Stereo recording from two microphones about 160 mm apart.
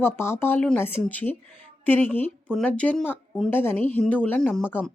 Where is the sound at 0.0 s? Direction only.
15° left (ahead or behind).